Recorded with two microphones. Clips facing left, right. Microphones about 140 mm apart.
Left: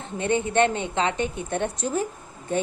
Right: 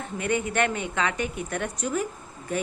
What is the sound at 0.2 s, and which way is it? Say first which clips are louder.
A woman's voice: left 4 dB; 25° left (ahead or behind).